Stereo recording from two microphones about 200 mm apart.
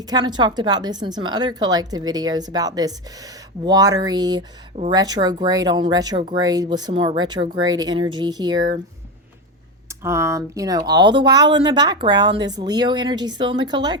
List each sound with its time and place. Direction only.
0.1 s a woman's voice: 20° right (ahead or behind)
10.0 s a woman's voice: 15° right (ahead or behind)